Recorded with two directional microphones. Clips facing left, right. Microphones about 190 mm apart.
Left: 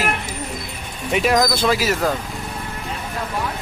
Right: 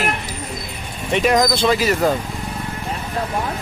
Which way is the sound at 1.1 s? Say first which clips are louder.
Right 1 dB; centre (ahead or behind).